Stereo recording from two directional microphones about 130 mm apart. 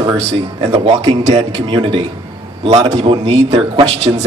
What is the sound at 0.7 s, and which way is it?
A man's voice, 55° right (ahead or behind).